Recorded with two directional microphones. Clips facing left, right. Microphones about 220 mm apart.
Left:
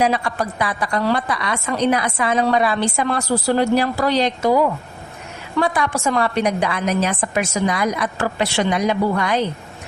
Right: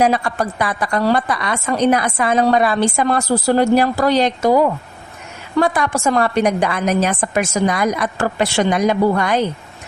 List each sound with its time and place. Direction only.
0.0 s a woman's voice: 45° right (ahead or behind)
5.5 s a woman's voice: 45° right (ahead or behind)